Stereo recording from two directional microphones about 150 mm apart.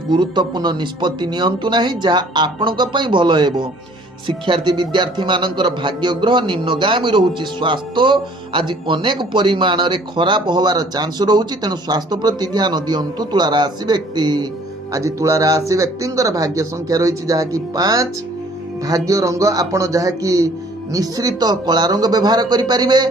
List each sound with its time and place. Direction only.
0.1 s a man's voice: 30° right (ahead or behind)